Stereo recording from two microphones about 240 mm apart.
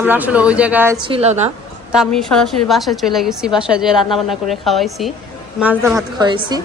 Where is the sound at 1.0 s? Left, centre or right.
Right.